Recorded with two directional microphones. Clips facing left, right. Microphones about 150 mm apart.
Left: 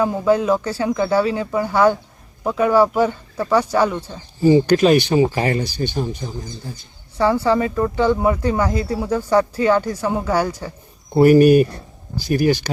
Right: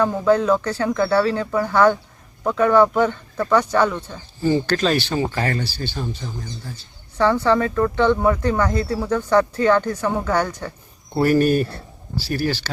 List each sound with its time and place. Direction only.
0.0 s speech: 10° left (ahead or behind)